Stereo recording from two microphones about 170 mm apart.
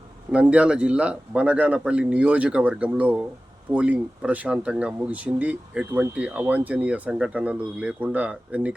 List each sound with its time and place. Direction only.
0.3 s speech: 5° right (ahead or behind)